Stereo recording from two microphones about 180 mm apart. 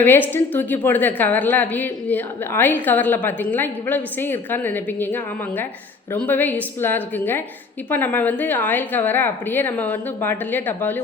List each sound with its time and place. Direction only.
0.3 s a woman's voice: 10° left (ahead or behind)